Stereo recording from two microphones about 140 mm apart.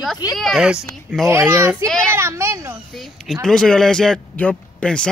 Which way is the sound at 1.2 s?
15° right (ahead or behind).